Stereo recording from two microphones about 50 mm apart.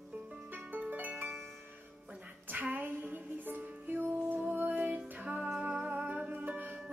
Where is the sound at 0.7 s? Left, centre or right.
Right.